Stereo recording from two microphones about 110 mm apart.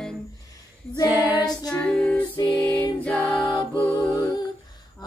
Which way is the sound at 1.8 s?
10° left (ahead or behind).